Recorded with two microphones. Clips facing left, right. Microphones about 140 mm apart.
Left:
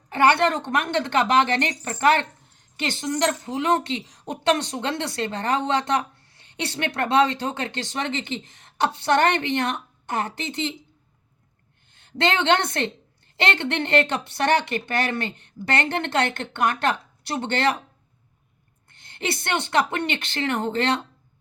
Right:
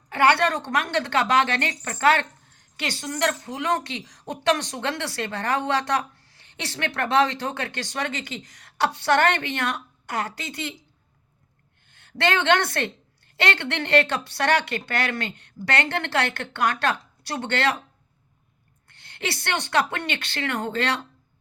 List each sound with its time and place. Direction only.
0.1 s speech: 20° left (ahead or behind)
11.9 s a woman's voice: 20° left (ahead or behind)
18.9 s speech: 20° left (ahead or behind)